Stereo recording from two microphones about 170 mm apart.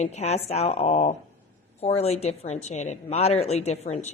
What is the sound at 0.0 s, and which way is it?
A woman's voice, 40° left (ahead or behind).